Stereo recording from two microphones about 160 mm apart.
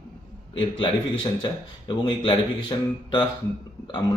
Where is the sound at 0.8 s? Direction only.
30° left (ahead or behind).